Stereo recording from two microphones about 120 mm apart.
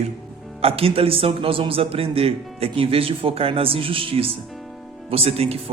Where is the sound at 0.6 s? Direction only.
55° right (ahead or behind).